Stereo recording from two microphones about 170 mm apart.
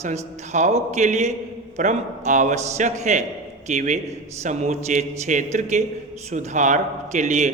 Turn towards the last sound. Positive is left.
turn(degrees=-45)  # may be behind; listen again after turning